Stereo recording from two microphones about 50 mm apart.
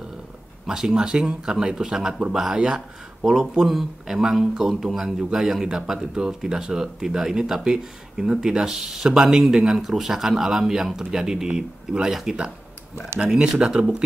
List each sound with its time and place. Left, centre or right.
0.7 s speech: centre